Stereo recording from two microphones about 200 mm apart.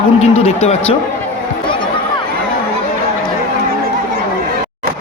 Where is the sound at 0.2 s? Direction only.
30° left (ahead or behind).